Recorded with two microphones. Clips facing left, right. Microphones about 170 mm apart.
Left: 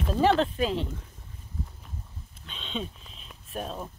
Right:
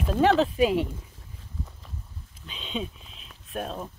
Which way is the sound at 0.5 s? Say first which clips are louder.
Right 5 dB; 10° right (ahead or behind).